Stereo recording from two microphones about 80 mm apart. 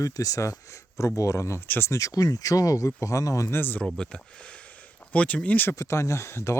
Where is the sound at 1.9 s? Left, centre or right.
Left.